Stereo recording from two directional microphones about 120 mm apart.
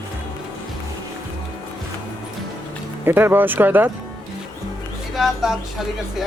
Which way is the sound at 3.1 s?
15° right (ahead or behind).